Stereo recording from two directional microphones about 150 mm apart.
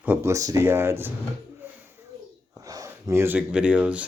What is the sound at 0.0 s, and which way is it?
Speech, 15° right (ahead or behind).